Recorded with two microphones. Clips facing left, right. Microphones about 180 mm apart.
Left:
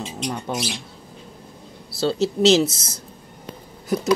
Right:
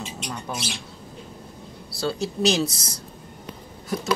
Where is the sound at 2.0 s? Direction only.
25° left (ahead or behind).